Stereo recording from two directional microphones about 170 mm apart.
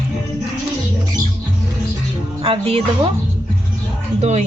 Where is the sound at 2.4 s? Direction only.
35° right (ahead or behind).